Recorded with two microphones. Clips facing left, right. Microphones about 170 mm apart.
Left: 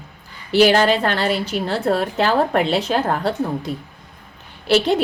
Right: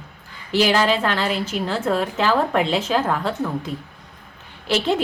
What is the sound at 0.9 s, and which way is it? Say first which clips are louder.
A woman's voice: left 2 dB; 35° left (ahead or behind).